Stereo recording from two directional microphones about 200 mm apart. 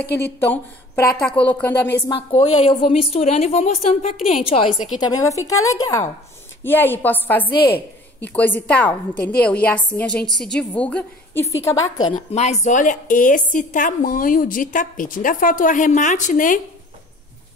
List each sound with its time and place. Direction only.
0.2 s a woman's voice: 10° left (ahead or behind)
2.0 s a woman's voice: 30° left (ahead or behind)
5.0 s a woman's voice: 20° left (ahead or behind)
7.5 s a woman's voice: 50° left (ahead or behind)
8.2 s a woman's voice: 10° left (ahead or behind)
12.1 s speech: 35° left (ahead or behind)